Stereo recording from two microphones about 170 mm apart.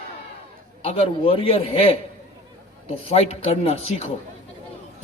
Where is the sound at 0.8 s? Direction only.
35° left (ahead or behind).